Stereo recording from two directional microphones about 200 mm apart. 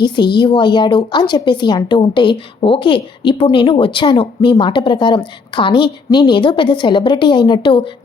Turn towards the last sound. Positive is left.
turn(degrees=25)  # may be behind; listen again after turning